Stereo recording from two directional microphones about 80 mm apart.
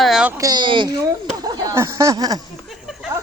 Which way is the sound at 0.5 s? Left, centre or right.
Right.